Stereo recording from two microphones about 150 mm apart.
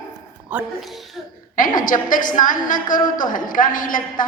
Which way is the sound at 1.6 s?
65° left (ahead or behind).